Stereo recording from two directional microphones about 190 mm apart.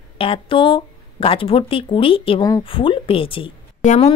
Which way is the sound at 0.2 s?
25° left (ahead or behind).